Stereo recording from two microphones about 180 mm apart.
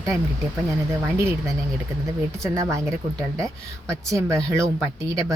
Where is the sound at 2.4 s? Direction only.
15° right (ahead or behind).